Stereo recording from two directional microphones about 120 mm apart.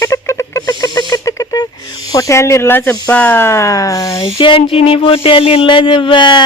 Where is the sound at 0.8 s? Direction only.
30° left (ahead or behind).